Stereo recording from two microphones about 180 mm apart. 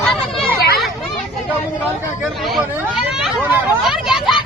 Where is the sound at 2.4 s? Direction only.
Centre (ahead or behind).